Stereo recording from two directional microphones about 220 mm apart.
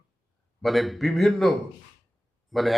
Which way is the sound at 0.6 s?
Centre (ahead or behind).